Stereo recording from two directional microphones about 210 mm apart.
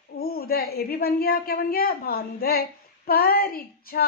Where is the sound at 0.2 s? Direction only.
45° left (ahead or behind).